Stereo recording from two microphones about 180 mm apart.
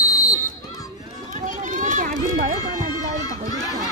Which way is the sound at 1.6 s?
45° right (ahead or behind).